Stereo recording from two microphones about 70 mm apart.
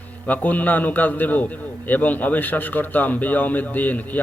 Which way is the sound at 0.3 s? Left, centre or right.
Left.